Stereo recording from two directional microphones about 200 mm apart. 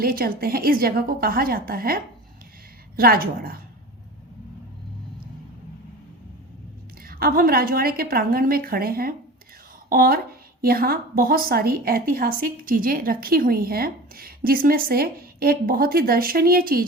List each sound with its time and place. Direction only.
0.0 s a woman's voice: 45° right (ahead or behind)
7.0 s a woman's voice: 50° right (ahead or behind)